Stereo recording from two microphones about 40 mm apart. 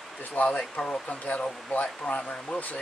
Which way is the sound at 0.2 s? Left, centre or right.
Left.